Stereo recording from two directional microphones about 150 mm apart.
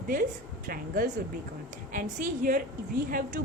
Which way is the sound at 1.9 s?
65° right (ahead or behind).